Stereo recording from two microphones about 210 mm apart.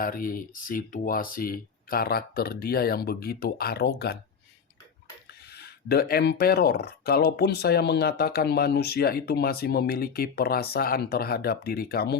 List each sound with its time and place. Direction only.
0.0 s speech: 40° left (ahead or behind)
5.5 s speech: 50° left (ahead or behind)